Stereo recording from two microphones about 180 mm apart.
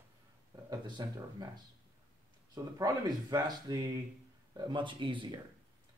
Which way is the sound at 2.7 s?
20° right (ahead or behind).